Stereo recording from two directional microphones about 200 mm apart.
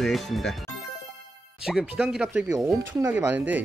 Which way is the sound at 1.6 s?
5° right (ahead or behind).